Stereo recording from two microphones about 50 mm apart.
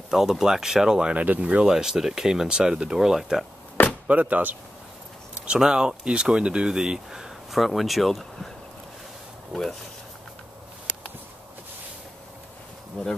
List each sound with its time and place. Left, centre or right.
0.1 s speech: centre
1.1 s speech: right
1.7 s speech: centre
4.1 s speech: right
5.3 s speech: centre
9.5 s speech: centre
13.0 s speech: centre